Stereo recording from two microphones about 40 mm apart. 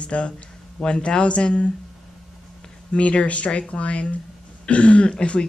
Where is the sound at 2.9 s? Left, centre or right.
Left.